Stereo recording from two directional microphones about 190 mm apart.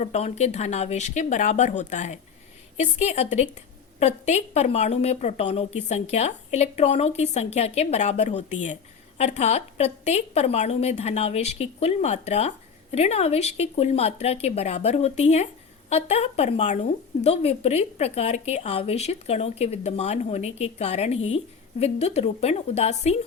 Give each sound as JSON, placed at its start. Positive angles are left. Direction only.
{"t": 0.0, "sound": "a woman's voice", "side_deg": 35}